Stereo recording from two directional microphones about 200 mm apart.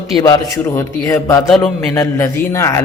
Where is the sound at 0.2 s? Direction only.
15° left (ahead or behind).